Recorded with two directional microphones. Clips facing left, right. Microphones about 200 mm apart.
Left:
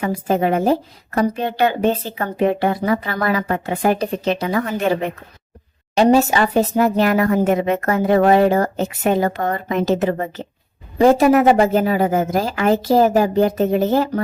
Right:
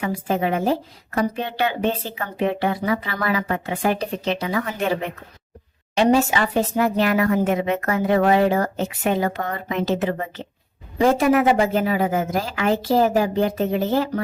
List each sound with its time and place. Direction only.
0.0 s a woman's voice: 45° left (ahead or behind)